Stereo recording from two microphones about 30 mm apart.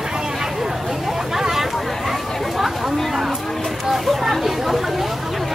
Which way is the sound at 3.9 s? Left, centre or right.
Centre.